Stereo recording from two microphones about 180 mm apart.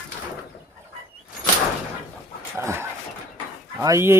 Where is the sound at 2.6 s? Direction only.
15° right (ahead or behind).